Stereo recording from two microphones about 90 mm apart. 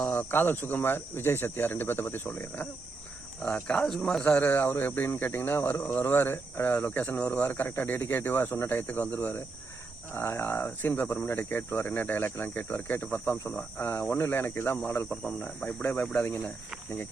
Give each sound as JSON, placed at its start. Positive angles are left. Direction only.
{"t": 0.0, "sound": "speech", "side_deg": 20}
{"t": 3.4, "sound": "speech", "side_deg": 15}
{"t": 4.2, "sound": "speech", "side_deg": 15}
{"t": 15.1, "sound": "speech", "side_deg": 5}
{"t": 15.4, "sound": "speech", "side_deg": 15}